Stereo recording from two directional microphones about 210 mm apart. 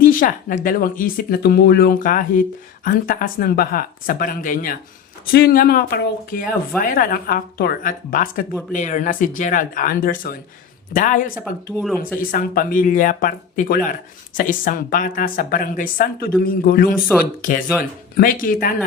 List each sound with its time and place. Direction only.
0.0 s speech: 40° left (ahead or behind)
11.3 s speech: 5° right (ahead or behind)
12.3 s speech: 45° left (ahead or behind)